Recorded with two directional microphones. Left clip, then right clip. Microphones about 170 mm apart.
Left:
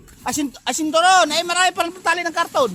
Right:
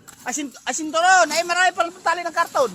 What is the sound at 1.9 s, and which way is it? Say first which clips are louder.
Speech: left 2 dB; 50° left (ahead or behind).